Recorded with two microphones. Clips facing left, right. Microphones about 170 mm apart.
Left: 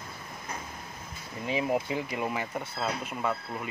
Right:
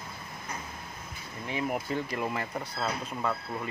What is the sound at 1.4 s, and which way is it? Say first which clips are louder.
Speech: left 4 dB; 20° left (ahead or behind).